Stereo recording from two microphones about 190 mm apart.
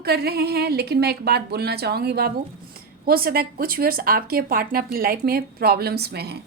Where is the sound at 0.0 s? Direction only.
55° right (ahead or behind).